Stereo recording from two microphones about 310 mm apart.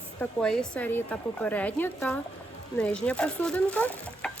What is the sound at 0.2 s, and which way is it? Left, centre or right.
Speech, centre.